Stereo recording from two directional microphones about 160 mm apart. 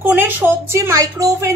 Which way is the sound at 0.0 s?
10° right (ahead or behind).